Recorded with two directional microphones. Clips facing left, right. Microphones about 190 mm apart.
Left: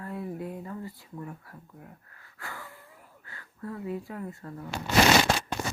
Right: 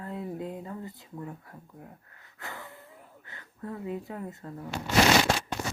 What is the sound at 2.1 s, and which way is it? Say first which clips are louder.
Wheeze: even; 20° right (ahead or behind).